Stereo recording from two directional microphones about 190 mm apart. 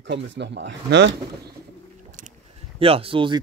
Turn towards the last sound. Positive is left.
turn(degrees=-25)  # may be behind; listen again after turning